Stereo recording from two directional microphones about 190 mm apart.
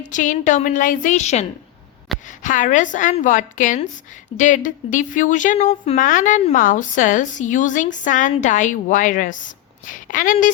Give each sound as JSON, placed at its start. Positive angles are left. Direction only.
{"t": 0.0, "sound": "a woman's voice", "side_deg": 40}